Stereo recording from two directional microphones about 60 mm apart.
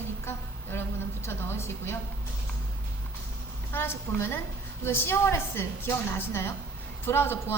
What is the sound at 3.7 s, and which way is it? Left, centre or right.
A woman's voice, left.